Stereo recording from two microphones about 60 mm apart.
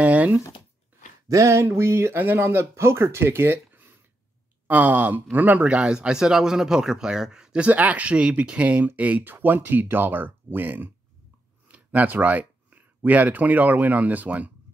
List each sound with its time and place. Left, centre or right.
0.0 s a sound: right
1.3 s speech: right
5.8 s a man's voice: centre
7.6 s speech: right